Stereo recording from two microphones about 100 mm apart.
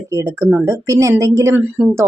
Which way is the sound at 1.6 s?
20° right (ahead or behind).